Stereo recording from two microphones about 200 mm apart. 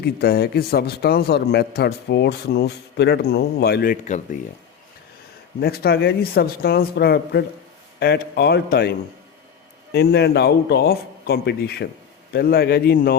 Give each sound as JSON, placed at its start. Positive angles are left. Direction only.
{"t": 0.0, "sound": "a man's voice", "side_deg": 50}
{"t": 4.0, "sound": "speech", "side_deg": 35}
{"t": 5.5, "sound": "a man's voice", "side_deg": 50}